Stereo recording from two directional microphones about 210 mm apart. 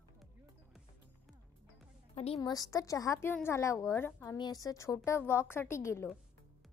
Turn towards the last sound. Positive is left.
turn(degrees=15)  # may be behind; listen again after turning